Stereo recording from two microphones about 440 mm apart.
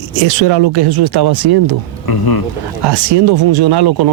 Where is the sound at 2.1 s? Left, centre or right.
Left.